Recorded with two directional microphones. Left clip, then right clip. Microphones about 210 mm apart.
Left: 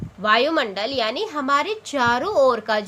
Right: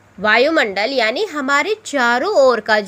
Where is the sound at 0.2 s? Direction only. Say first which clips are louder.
Right 5 dB; 25° right (ahead or behind).